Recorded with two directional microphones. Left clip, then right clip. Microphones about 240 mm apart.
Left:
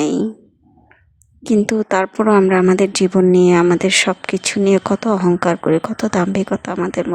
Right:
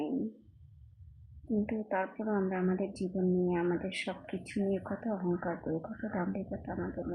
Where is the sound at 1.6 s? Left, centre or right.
Left.